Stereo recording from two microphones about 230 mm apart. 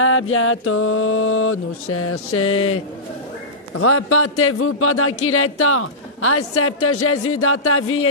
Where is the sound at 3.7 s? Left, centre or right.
Left.